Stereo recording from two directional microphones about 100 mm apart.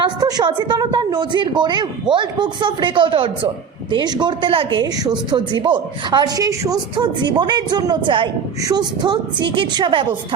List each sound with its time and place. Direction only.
0.0 s a woman's voice: 45° right (ahead or behind); by 3.5 s 60° right (ahead or behind)
3.9 s a woman's voice: 45° right (ahead or behind)
4.8 s a woman's voice: 45° right (ahead or behind)
6.9 s a woman's voice: 50° right (ahead or behind)
8.6 s a woman's voice: 45° right (ahead or behind)